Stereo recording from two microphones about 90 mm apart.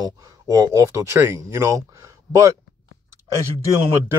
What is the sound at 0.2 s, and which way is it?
Speech, 40° right (ahead or behind).